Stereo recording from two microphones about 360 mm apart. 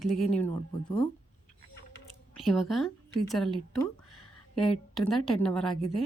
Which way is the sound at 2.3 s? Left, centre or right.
Centre.